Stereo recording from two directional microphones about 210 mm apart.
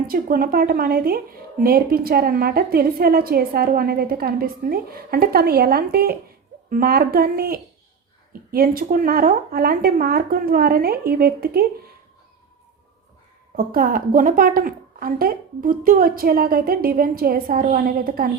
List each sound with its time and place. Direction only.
0.1 s a woman's voice: 45° right (ahead or behind)
13.6 s a woman's voice: 40° right (ahead or behind)